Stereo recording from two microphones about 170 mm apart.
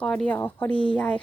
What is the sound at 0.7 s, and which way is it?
Speech, 30° left (ahead or behind).